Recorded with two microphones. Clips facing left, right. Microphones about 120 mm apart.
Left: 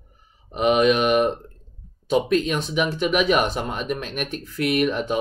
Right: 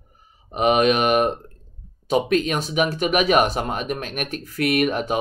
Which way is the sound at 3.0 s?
50° right (ahead or behind).